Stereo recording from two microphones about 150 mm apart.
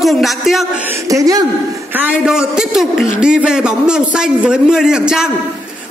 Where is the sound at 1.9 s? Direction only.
5° right (ahead or behind).